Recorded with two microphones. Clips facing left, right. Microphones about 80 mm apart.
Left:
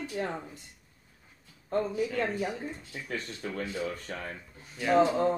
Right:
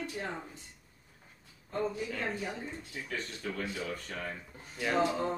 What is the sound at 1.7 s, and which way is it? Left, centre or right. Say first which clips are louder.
Speech: left 4 dB; left.